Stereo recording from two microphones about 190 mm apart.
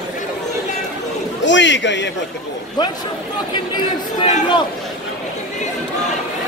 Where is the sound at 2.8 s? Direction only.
20° left (ahead or behind).